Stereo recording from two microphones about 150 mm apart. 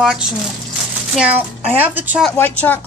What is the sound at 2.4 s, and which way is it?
Speech, 15° left (ahead or behind).